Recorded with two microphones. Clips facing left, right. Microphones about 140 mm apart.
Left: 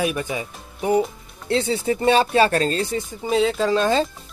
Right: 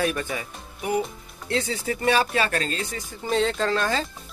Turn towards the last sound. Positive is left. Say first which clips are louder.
# left 6 dB
turn(degrees=25)  # may be behind; listen again after turning